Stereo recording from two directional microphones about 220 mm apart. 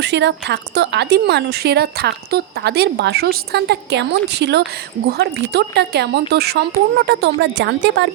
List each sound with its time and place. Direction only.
0.0 s speech: 50° right (ahead or behind)